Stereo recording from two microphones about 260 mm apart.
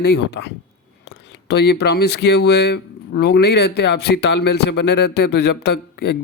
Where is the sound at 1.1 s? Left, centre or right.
Left.